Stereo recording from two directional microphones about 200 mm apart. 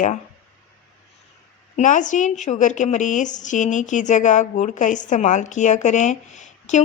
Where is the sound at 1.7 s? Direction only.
40° left (ahead or behind).